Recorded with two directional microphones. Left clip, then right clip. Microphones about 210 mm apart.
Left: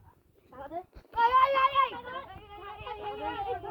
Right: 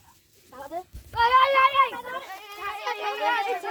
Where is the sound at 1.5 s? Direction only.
65° right (ahead or behind).